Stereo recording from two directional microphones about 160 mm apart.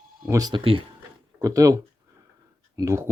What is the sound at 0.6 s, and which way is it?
Speech, 35° right (ahead or behind).